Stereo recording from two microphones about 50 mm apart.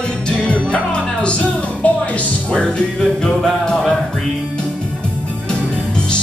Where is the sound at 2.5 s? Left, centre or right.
Centre.